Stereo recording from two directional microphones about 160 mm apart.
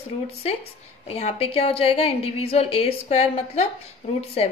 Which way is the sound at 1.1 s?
40° left (ahead or behind).